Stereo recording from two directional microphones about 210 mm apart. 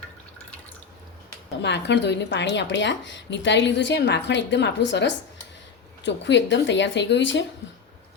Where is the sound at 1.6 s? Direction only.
55° left (ahead or behind).